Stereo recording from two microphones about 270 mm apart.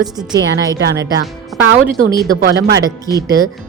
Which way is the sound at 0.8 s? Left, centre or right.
Right.